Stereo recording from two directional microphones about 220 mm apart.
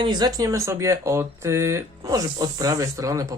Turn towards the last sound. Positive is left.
turn(degrees=-15)  # may be behind; listen again after turning